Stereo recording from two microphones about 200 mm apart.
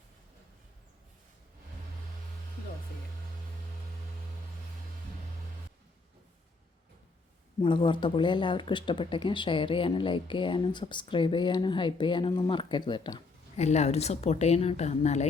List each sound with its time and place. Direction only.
7.6 s speech: 25° left (ahead or behind)
13.6 s speech: 35° left (ahead or behind)